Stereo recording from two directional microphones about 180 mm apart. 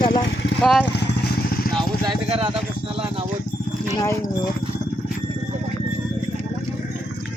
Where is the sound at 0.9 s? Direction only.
70° left (ahead or behind).